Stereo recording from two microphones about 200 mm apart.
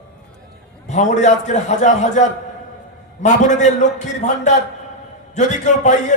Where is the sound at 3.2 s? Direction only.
35° left (ahead or behind).